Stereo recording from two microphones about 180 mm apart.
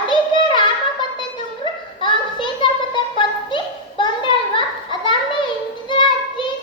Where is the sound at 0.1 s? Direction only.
25° left (ahead or behind).